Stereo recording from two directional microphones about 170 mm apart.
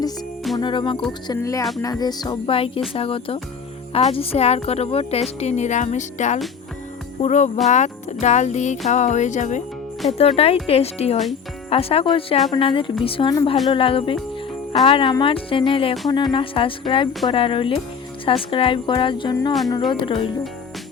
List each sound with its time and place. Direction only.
0.6 s speech: 30° left (ahead or behind)
1.4 s speech: 20° left (ahead or behind); by 9.6 s 45° left (ahead or behind)
10.2 s speech: 35° left (ahead or behind)